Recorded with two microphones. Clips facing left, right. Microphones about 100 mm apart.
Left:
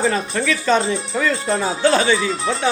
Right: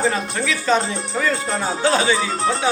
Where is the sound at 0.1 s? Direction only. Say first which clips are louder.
Left 2 dB; 5° right (ahead or behind).